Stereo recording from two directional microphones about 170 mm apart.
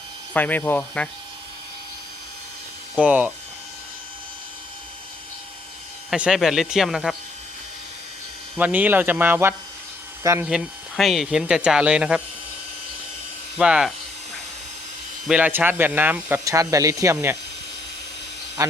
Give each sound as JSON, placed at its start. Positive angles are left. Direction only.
{"t": 0.3, "sound": "speech", "side_deg": 10}
{"t": 3.0, "sound": "speech", "side_deg": -10}
{"t": 6.1, "sound": "speech", "side_deg": -5}
{"t": 8.5, "sound": "speech", "side_deg": -10}
{"t": 10.4, "sound": "speech", "side_deg": 0}
{"t": 13.6, "sound": "speech", "side_deg": -5}
{"t": 15.3, "sound": "speech", "side_deg": -10}
{"t": 18.6, "sound": "speech", "side_deg": -20}